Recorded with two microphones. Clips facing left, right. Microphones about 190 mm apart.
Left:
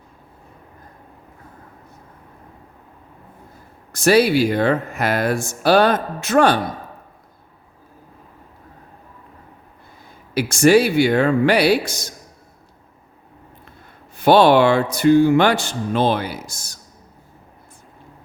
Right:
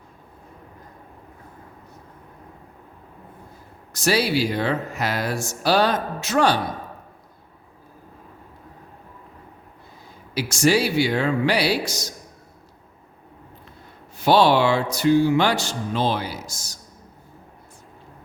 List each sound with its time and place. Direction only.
3.9 s speech: 55° left (ahead or behind)
10.3 s speech: 55° left (ahead or behind)
14.2 s speech: 55° left (ahead or behind)